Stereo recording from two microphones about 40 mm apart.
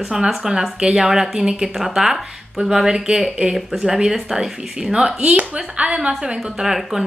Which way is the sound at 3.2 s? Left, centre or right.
Centre.